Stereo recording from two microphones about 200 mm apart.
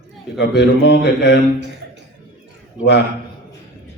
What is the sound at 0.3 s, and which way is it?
Mantra, 60° left (ahead or behind).